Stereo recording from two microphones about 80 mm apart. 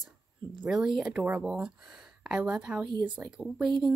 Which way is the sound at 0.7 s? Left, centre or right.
Centre.